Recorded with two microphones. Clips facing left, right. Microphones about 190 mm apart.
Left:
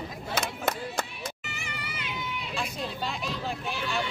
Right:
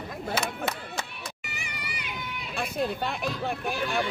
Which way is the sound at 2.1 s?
60° right (ahead or behind).